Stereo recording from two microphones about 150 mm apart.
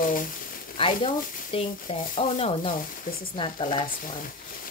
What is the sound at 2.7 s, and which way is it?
Speech, 70° left (ahead or behind).